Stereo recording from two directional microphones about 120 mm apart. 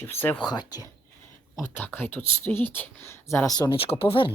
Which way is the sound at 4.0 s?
45° left (ahead or behind).